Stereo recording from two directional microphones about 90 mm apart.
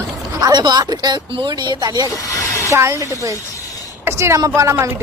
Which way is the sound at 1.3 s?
70° right (ahead or behind).